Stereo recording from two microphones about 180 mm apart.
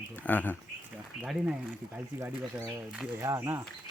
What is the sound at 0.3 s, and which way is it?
Speech, 10° left (ahead or behind).